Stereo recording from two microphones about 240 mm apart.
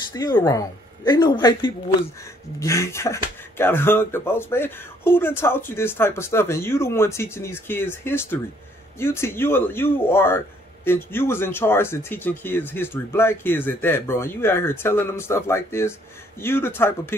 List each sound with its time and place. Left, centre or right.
0.1 s speech: centre